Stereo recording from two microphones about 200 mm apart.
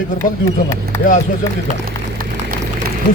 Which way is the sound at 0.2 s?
45° left (ahead or behind).